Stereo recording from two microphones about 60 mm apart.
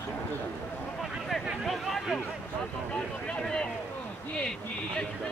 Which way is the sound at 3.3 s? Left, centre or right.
Centre.